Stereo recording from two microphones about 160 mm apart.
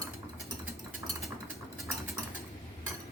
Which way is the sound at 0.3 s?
Centre (ahead or behind).